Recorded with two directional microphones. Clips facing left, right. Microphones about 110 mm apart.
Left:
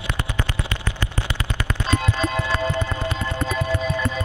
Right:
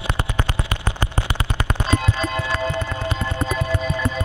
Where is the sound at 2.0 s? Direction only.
Centre (ahead or behind).